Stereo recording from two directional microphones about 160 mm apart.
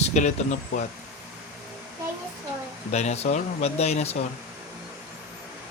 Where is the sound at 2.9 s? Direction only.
45° left (ahead or behind).